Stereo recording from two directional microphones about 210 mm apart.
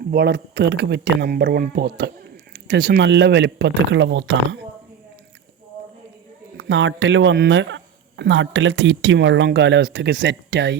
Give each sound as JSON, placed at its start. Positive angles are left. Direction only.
{"t": 0.1, "sound": "speech", "side_deg": -55}
{"t": 6.6, "sound": "speech", "side_deg": -60}